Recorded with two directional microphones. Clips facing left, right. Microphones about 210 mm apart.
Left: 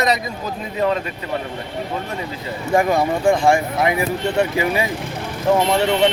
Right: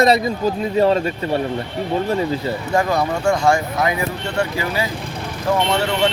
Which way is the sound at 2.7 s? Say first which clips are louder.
Left 3 dB; 20° left (ahead or behind).